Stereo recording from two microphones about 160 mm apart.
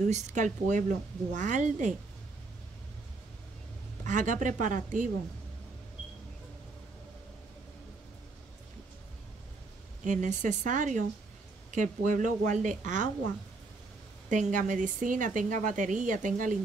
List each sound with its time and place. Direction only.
0.0 s a woman's voice: 45° right (ahead or behind)
4.0 s a woman's voice: 50° right (ahead or behind)
10.0 s a woman's voice: 50° right (ahead or behind)
14.3 s a woman's voice: 50° right (ahead or behind)